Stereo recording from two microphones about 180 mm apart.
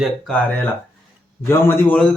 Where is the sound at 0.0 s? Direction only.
5° left (ahead or behind).